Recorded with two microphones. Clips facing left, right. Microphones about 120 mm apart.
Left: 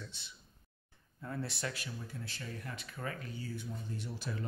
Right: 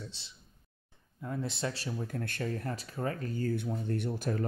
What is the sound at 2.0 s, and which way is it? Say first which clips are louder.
Speech: right 10 dB; 55° right (ahead or behind).